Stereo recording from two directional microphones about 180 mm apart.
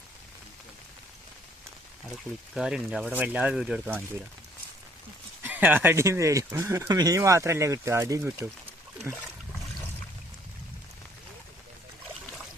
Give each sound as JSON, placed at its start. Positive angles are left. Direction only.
{"t": 2.6, "sound": "speech", "side_deg": -5}
{"t": 5.4, "sound": "speech", "side_deg": -10}